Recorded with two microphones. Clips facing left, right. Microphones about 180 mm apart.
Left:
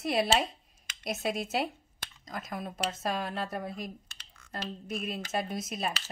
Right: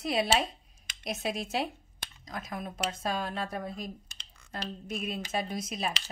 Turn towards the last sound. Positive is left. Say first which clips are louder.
# even
turn(degrees=5)  # may be behind; listen again after turning